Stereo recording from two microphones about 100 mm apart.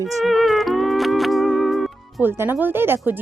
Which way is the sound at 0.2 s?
Centre (ahead or behind).